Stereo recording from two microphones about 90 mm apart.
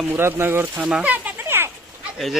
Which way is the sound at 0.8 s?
10° right (ahead or behind).